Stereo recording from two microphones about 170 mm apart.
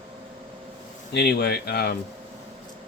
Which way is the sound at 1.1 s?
75° left (ahead or behind).